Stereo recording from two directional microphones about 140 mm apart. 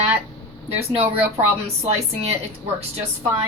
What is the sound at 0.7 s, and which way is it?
Speech, 45° right (ahead or behind).